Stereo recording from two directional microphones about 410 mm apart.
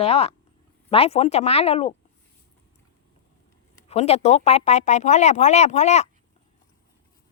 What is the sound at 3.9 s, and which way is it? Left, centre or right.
Speech, centre.